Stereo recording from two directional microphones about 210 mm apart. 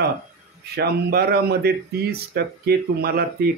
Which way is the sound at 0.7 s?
50° right (ahead or behind).